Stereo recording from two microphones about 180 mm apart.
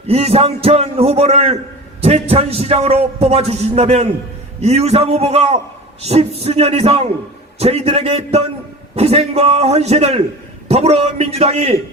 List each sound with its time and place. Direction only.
0.1 s a man's voice: 35° right (ahead or behind)